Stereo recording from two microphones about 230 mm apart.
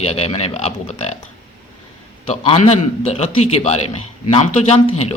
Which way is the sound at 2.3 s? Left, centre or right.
Left.